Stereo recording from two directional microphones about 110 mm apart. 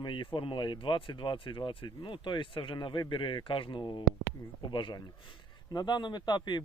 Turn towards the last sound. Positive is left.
turn(degrees=40)  # may be behind; listen again after turning